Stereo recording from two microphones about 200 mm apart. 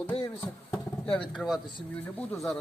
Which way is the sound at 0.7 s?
5° left (ahead or behind).